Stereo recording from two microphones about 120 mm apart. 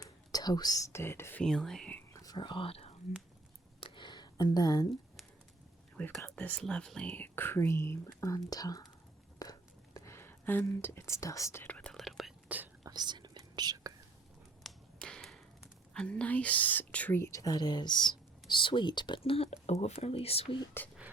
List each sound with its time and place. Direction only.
0.0 s speech: 35° left (ahead or behind)
1.4 s speech: 5° left (ahead or behind)
2.1 s whispering: 35° left (ahead or behind); by 2.9 s 55° left (ahead or behind)
3.8 s a sound: 45° left (ahead or behind)
6.2 s speech: 10° left (ahead or behind); by 8.9 s 30° left (ahead or behind)
9.4 s a sound: 30° left (ahead or behind); by 12.3 s centre (ahead or behind)
12.8 s whispering: 35° right (ahead or behind)
14.6 s speech: 5° left (ahead or behind); by 20.6 s 55° left (ahead or behind)